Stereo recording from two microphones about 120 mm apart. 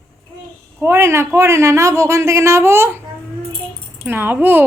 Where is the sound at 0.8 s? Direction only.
20° right (ahead or behind).